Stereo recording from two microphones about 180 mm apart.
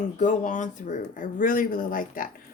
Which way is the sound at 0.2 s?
45° left (ahead or behind).